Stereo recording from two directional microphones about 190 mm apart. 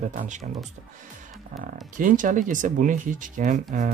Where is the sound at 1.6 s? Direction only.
45° right (ahead or behind).